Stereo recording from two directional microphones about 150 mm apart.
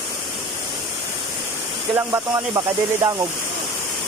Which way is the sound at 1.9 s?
20° right (ahead or behind).